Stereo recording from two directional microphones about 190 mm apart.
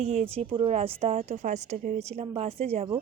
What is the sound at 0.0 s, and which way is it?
A woman's voice, 35° right (ahead or behind).